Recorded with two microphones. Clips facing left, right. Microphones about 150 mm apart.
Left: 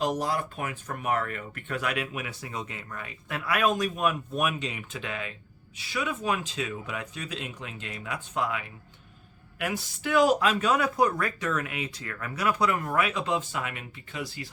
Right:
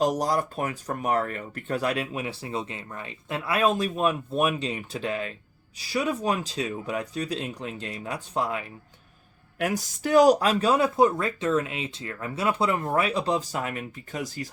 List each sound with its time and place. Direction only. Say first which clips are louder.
0.0 s speech: right 4 dB; 40° right (ahead or behind)